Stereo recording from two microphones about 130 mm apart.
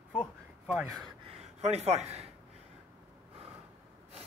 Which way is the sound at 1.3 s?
55° right (ahead or behind).